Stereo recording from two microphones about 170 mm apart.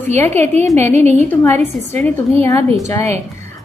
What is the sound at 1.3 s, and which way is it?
A woman's voice, 15° left (ahead or behind).